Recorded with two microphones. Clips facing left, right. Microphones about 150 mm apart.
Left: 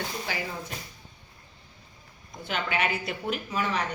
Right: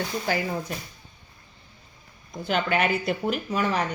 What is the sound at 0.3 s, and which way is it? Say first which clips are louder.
Speech: right 10 dB; 45° right (ahead or behind).